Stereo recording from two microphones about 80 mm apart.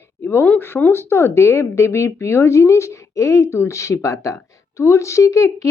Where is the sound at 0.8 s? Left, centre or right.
Left.